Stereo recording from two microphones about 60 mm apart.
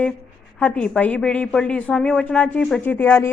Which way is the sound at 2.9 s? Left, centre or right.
Left.